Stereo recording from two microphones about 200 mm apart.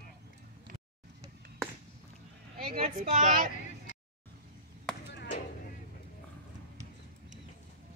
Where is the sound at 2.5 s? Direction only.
45° right (ahead or behind).